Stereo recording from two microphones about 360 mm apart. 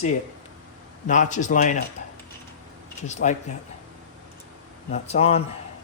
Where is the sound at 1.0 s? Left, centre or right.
Left.